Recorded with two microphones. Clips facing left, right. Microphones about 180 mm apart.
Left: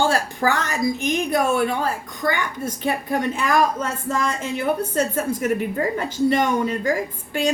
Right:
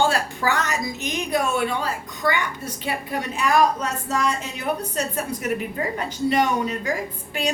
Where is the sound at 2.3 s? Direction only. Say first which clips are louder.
Left 2 dB; 45° left (ahead or behind).